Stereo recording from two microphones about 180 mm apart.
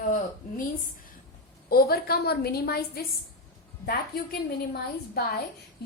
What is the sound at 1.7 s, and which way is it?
A woman's voice, 60° left (ahead or behind).